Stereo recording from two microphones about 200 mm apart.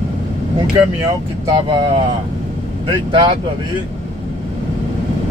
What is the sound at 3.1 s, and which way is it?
Speech, 25° right (ahead or behind).